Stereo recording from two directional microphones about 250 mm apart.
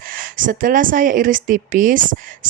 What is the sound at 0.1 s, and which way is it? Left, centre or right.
Speech, right.